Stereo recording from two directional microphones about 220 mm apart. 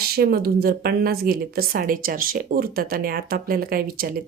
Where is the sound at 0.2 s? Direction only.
45° right (ahead or behind).